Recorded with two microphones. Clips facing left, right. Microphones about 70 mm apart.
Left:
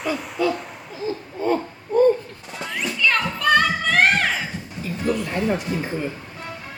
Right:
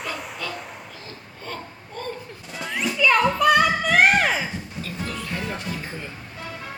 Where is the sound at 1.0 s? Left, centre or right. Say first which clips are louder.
Left 18 dB; centre.